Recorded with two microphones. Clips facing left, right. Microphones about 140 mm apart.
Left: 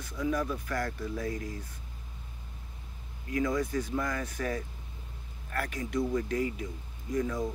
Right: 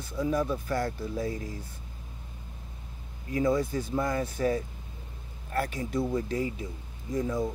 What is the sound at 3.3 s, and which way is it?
Speech, 30° right (ahead or behind).